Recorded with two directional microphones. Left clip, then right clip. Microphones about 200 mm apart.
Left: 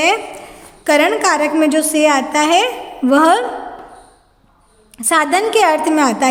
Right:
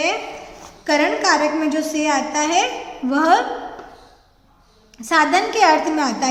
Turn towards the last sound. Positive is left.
turn(degrees=45)  # may be behind; listen again after turning